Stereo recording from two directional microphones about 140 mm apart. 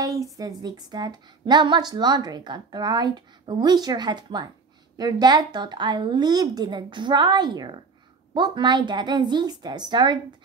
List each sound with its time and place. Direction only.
0.0 s a woman's voice: 25° right (ahead or behind)